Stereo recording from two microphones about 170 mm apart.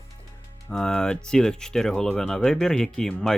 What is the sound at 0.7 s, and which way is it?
Speech, 5° left (ahead or behind).